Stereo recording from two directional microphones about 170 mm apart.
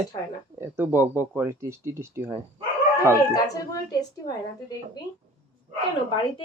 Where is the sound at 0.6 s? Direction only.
10° right (ahead or behind).